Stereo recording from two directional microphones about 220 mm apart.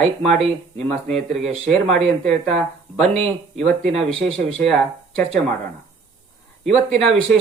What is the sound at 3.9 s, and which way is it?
Speech, 25° right (ahead or behind).